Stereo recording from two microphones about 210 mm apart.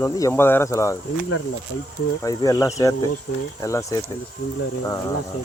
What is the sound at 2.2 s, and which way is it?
Speech, 15° left (ahead or behind).